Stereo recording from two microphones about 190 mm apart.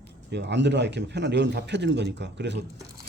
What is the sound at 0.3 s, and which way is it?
A man's voice, 65° right (ahead or behind).